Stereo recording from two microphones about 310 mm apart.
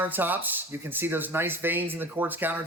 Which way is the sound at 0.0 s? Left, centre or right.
Centre.